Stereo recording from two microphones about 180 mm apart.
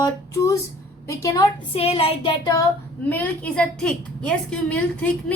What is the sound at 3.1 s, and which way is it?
A woman's voice, 10° left (ahead or behind).